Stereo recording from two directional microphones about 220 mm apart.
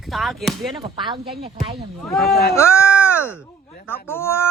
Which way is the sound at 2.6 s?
10° left (ahead or behind).